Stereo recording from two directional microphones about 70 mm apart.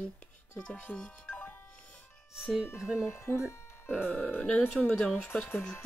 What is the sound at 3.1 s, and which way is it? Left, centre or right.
Speech, left.